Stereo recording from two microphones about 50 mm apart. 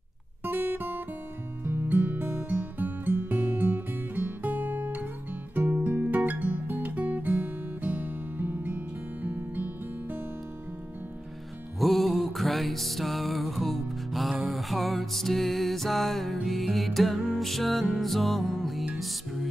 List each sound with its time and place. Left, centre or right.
0.4 s guitar: right
1.6 s music: right
2.2 s music: right
11.8 s music: centre